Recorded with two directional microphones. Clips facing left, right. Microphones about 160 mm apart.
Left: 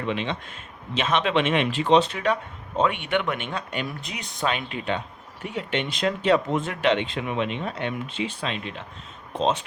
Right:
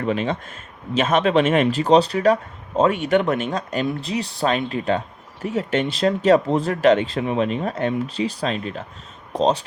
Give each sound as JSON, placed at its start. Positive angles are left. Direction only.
{"t": 0.0, "sound": "speech", "side_deg": -45}